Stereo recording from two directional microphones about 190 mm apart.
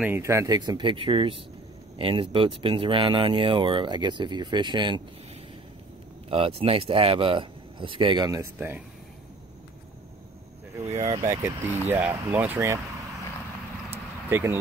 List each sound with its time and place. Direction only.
0.0 s speech: 15° right (ahead or behind)
6.2 s speech: 30° right (ahead or behind); by 8.8 s 10° right (ahead or behind)
10.8 s a sound: 35° right (ahead or behind)
11.1 s speech: 15° right (ahead or behind)
13.8 s vehicle: 10° right (ahead or behind)